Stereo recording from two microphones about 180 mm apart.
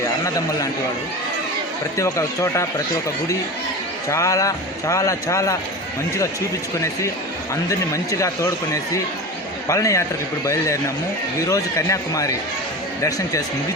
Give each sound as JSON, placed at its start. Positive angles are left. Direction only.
{"t": 2.0, "sound": "speech", "side_deg": 15}
{"t": 4.1, "sound": "speech", "side_deg": 15}
{"t": 8.2, "sound": "speech", "side_deg": 15}